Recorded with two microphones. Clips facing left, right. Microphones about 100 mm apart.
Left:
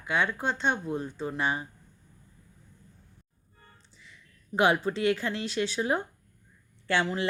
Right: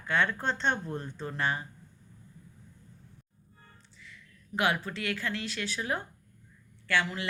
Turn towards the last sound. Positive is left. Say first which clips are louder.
# left 3 dB
turn(degrees=30)  # may be behind; listen again after turning